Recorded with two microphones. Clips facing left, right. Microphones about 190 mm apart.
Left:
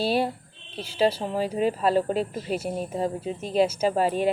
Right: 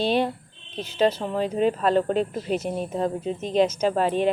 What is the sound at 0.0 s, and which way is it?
Speech, 5° left (ahead or behind).